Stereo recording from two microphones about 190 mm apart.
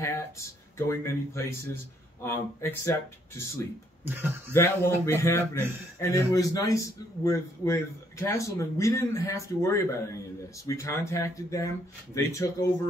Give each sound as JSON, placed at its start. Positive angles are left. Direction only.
{"t": 0.0, "sound": "a man's voice", "side_deg": 15}
{"t": 4.0, "sound": "speech", "side_deg": -10}
{"t": 4.6, "sound": "a man's voice", "side_deg": 15}